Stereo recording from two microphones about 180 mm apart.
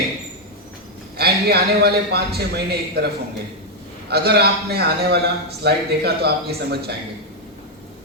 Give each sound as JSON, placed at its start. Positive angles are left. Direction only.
{"t": 1.1, "sound": "a man's voice", "side_deg": -65}
{"t": 4.1, "sound": "a man's voice", "side_deg": -60}